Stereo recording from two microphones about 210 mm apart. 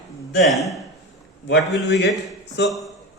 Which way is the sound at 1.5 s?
55° left (ahead or behind).